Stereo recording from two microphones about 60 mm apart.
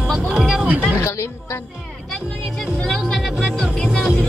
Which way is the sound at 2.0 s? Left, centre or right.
Centre.